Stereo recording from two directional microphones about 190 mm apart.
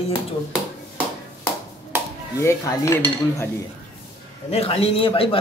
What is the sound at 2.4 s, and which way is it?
Dishes, 15° left (ahead or behind).